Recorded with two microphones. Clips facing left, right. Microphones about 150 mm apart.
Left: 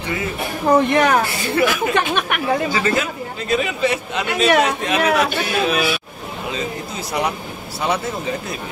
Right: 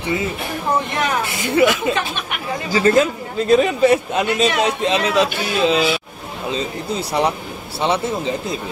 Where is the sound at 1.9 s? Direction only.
70° left (ahead or behind).